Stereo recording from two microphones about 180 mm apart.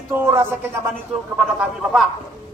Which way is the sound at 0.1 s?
15° right (ahead or behind).